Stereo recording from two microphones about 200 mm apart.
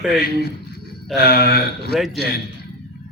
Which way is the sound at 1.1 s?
50° left (ahead or behind).